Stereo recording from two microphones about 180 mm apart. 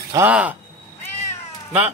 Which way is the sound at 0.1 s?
10° right (ahead or behind).